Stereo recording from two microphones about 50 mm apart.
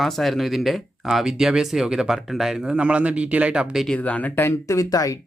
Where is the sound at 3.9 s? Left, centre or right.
Left.